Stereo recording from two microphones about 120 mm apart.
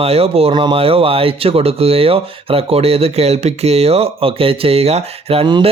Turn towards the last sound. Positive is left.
turn(degrees=-55)  # may be behind; listen again after turning